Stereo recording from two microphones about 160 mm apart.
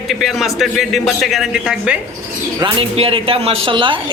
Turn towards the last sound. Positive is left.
turn(degrees=-30)  # may be behind; listen again after turning